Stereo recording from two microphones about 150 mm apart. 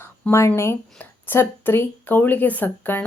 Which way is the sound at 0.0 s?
15° left (ahead or behind).